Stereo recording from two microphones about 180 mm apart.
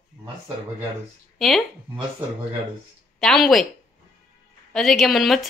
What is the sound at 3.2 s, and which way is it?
Speech, centre (ahead or behind).